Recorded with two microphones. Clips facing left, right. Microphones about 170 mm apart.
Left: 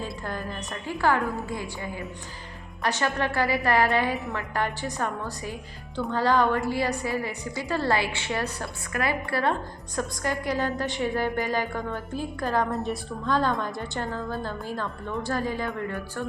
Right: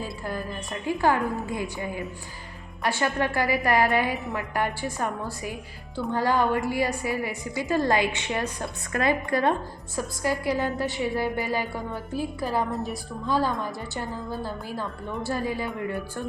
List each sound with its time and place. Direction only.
0.3 s a woman's voice: 15° right (ahead or behind)
14.1 s a woman's voice: 15° right (ahead or behind)